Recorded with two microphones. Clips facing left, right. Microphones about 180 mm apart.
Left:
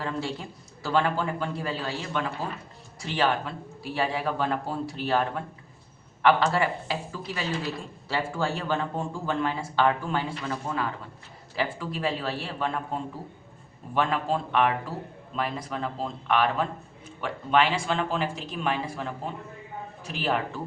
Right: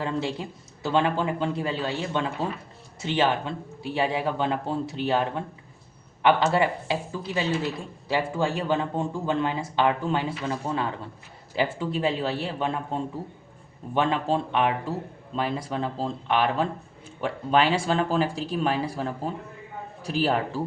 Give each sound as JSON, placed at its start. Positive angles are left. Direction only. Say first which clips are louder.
{"t": 0.0, "sound": "speech", "louder": "right 3 dB", "side_deg": -20}